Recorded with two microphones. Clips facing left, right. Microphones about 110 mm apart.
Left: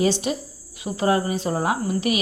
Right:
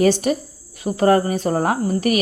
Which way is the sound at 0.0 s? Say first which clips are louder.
Right 5 dB; 50° right (ahead or behind).